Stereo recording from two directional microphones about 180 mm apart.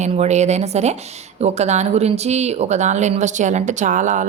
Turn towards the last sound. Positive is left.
turn(degrees=-45)  # may be behind; listen again after turning